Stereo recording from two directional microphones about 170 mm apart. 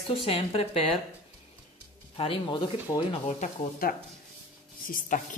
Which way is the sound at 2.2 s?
30° left (ahead or behind).